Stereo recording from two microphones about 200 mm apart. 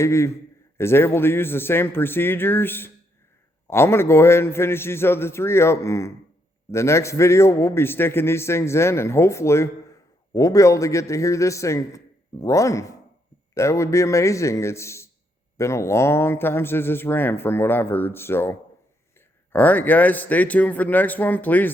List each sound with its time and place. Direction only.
0.0 s a man's voice: 15° left (ahead or behind)
19.5 s a man's voice: 10° left (ahead or behind)